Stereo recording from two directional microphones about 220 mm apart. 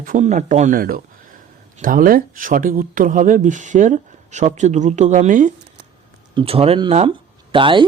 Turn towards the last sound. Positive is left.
turn(degrees=-20)  # may be behind; listen again after turning